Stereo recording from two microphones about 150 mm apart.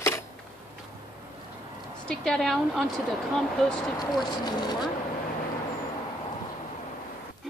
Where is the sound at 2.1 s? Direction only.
5° left (ahead or behind).